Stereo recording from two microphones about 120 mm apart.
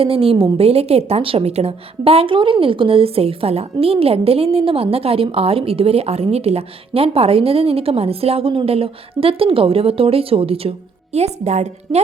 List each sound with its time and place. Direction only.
0.0 s a woman's voice: 50° right (ahead or behind)